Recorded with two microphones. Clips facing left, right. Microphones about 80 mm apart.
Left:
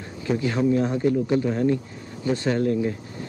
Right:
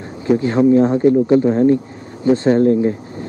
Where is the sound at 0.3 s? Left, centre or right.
Right.